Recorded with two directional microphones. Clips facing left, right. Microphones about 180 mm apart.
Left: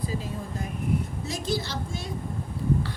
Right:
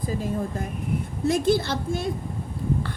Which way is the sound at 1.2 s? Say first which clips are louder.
Right 9 dB; 55° right (ahead or behind).